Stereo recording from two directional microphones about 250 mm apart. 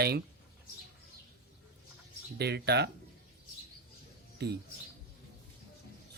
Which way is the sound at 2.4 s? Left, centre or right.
Right.